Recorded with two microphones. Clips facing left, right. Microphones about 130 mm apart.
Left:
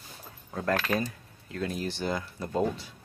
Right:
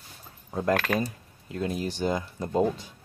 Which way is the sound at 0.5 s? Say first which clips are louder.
Right 3 dB; 15° right (ahead or behind).